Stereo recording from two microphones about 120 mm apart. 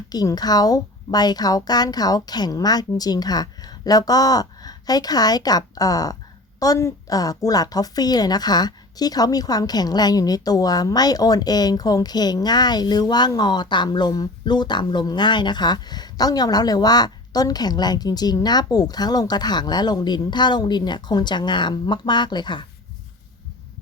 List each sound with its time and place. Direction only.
0.1 s a woman's voice: 35° left (ahead or behind)